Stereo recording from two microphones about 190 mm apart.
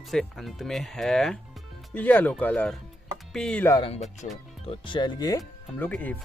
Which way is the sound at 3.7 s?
30° left (ahead or behind).